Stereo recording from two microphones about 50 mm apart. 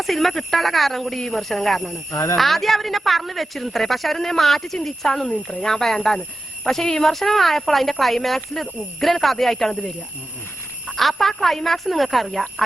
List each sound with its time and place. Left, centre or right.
0.0 s a woman's voice: centre
10.8 s a woman's voice: centre